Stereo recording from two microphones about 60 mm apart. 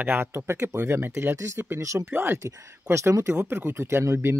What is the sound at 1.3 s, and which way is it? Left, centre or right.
Speech, right.